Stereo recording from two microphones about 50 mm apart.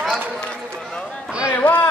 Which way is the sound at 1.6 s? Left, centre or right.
Left.